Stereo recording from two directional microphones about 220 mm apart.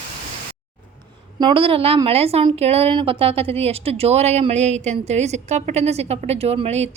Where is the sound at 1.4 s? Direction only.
20° right (ahead or behind).